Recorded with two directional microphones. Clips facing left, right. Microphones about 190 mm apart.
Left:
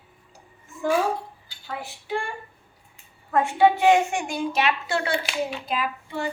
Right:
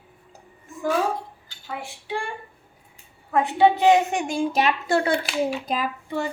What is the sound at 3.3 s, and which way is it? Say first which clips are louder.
A woman's voice: right 1 dB; 20° right (ahead or behind).